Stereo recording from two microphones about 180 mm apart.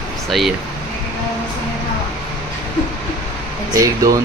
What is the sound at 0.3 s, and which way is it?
Speech, centre (ahead or behind).